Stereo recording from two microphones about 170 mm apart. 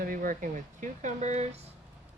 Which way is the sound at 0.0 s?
55° right (ahead or behind).